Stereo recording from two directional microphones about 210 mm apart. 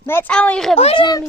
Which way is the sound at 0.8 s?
25° left (ahead or behind).